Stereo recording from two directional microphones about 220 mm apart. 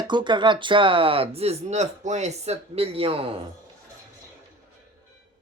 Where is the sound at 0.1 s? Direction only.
20° right (ahead or behind).